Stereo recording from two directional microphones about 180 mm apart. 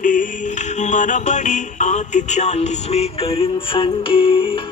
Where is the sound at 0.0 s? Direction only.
45° left (ahead or behind); by 4.6 s 30° left (ahead or behind).